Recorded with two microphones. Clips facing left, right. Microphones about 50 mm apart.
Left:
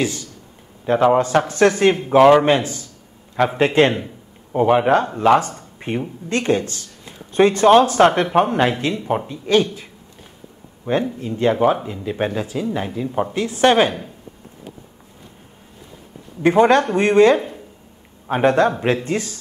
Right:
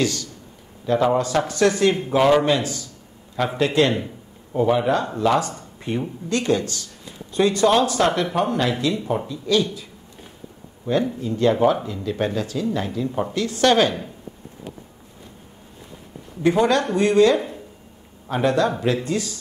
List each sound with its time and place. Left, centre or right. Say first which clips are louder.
0.0 s a man's voice: even; left
0.8 s a man's voice: left 4 dB; left
11.1 s speech: left 1 dB; left
16.4 s speech: left 4 dB; left